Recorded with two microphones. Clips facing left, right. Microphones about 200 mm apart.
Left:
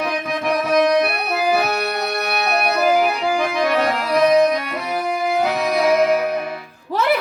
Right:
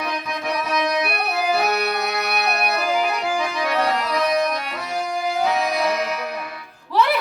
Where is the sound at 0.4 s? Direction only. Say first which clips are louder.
Left 7 dB; 55° left (ahead or behind).